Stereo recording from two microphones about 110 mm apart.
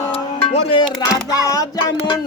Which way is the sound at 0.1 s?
60° left (ahead or behind).